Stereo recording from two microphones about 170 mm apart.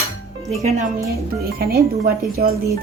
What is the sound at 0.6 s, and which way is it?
Speech, 45° right (ahead or behind).